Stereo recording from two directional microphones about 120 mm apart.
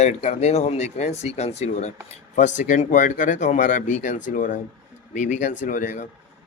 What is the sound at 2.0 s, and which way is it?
Speech, 90° left.